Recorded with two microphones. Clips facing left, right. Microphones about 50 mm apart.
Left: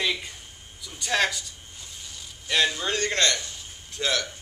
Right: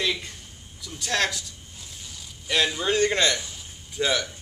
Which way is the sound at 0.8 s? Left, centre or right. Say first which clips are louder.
Left 1 dB; centre.